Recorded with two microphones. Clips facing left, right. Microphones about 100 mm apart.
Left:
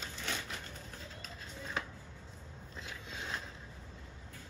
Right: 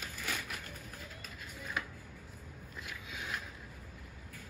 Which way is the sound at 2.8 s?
25° left (ahead or behind).